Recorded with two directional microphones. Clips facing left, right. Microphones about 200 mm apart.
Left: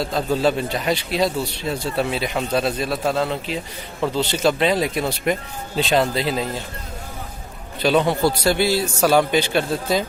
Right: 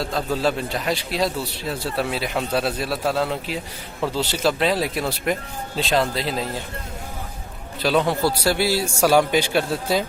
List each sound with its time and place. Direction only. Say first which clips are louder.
0.0 s a man's voice: left 3 dB; centre (ahead or behind)
7.8 s a man's voice: left 2 dB; centre (ahead or behind)